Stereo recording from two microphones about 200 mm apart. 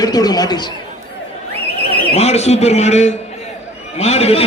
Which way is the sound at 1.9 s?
30° left (ahead or behind).